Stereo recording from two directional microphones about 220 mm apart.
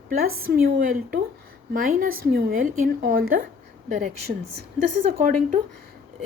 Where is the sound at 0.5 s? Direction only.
40° right (ahead or behind).